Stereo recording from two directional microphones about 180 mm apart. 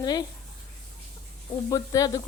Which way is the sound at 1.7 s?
20° left (ahead or behind).